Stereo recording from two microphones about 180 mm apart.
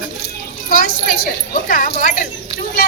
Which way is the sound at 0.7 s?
50° left (ahead or behind).